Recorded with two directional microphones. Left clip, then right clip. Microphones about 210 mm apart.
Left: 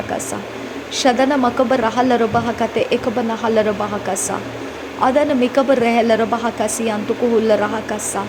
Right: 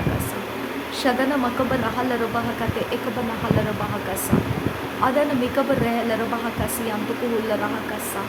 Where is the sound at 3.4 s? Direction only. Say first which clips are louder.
Left 8 dB; 25° left (ahead or behind).